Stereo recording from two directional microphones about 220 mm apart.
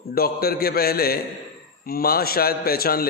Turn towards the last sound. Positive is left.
turn(degrees=45)  # may be behind; listen again after turning